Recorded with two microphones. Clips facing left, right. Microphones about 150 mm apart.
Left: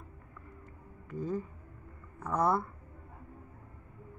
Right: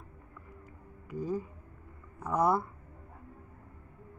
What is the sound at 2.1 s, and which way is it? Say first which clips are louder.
Speech: right 2 dB; 10° right (ahead or behind).